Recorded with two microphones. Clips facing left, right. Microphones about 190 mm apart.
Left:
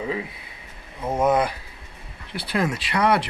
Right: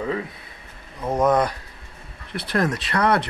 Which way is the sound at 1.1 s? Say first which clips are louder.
Right 1 dB; 5° left (ahead or behind).